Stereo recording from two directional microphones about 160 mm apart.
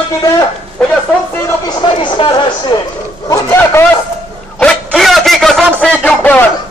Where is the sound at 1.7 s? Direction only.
30° left (ahead or behind).